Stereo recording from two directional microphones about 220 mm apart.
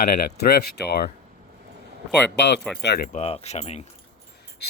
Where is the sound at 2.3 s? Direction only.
50° left (ahead or behind); by 3.9 s 30° left (ahead or behind).